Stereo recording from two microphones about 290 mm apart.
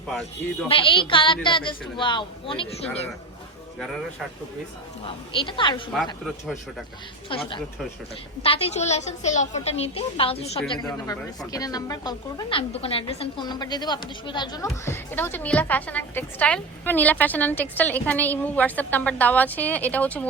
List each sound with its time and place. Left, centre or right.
0.7 s a woman's voice: centre
5.0 s a woman's voice: centre
7.3 s a woman's voice: centre